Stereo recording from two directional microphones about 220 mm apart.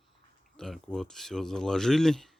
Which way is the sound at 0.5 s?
Centre (ahead or behind).